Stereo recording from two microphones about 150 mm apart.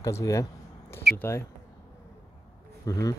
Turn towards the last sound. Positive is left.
turn(degrees=25)  # may be behind; listen again after turning